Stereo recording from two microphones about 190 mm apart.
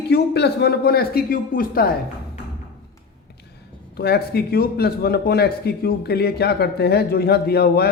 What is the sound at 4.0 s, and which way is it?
Speech, 55° left (ahead or behind).